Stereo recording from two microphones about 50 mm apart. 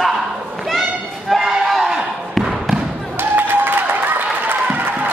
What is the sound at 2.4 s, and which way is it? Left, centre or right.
Basketball bounce, centre.